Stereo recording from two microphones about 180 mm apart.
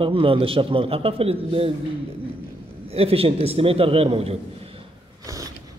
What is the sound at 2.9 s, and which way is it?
A man's voice, 35° right (ahead or behind).